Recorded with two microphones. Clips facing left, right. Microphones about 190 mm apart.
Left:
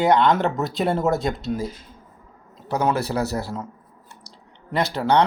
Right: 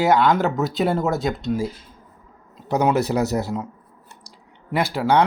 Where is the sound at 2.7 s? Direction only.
20° right (ahead or behind).